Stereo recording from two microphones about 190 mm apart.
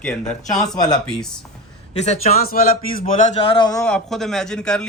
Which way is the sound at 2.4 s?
50° left (ahead or behind).